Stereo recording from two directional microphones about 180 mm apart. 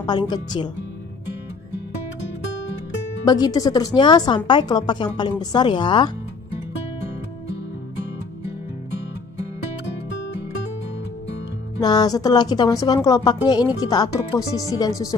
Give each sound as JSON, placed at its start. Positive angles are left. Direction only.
{"t": 0.3, "sound": "speech", "side_deg": 25}
{"t": 3.3, "sound": "speech", "side_deg": 20}
{"t": 11.8, "sound": "speech", "side_deg": 20}